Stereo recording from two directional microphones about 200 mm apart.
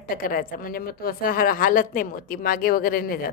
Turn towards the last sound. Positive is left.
turn(degrees=45)  # may be behind; listen again after turning